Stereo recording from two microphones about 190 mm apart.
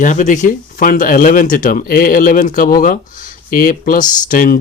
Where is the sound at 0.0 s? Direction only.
40° left (ahead or behind).